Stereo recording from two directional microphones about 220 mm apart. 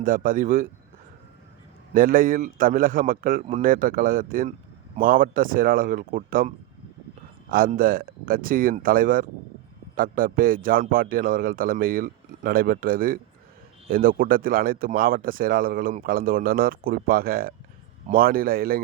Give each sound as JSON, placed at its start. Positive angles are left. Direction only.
{"t": 0.0, "sound": "a man's voice", "side_deg": -40}
{"t": 1.9, "sound": "a man's voice", "side_deg": -35}
{"t": 7.5, "sound": "a man's voice", "side_deg": -40}